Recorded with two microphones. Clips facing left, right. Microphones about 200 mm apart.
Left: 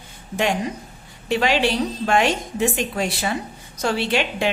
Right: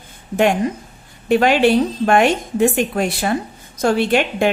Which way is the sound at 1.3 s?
55° right (ahead or behind).